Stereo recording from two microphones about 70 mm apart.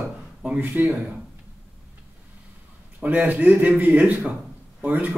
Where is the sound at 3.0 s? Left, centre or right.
Right.